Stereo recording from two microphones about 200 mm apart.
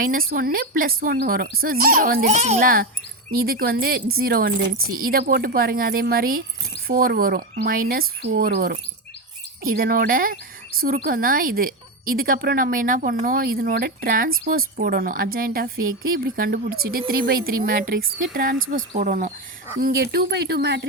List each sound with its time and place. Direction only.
0.0 s speech: 45° right (ahead or behind)
19.8 s speech: 50° right (ahead or behind)